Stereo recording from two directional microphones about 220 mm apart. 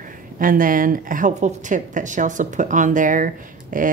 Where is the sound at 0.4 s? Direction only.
40° right (ahead or behind).